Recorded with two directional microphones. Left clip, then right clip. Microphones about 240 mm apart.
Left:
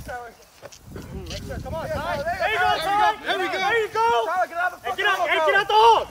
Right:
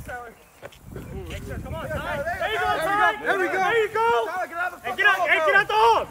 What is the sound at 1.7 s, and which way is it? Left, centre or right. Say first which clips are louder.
Vehicle: left 2 dB; left.